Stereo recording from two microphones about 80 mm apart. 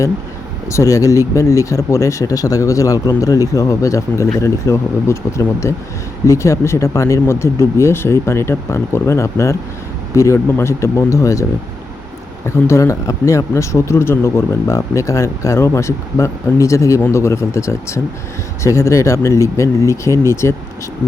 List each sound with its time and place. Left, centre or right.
0.7 s speech: left
12.5 s speech: left